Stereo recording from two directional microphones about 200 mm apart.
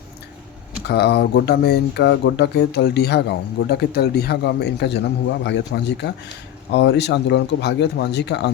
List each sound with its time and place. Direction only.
0.9 s speech: 55° left (ahead or behind)